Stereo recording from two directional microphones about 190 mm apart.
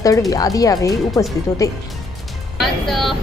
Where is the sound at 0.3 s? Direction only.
20° left (ahead or behind).